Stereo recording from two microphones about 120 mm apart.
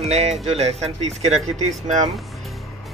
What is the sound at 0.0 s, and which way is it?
Speech, 60° right (ahead or behind).